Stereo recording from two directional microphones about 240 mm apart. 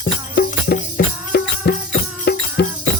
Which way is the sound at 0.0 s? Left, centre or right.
Left.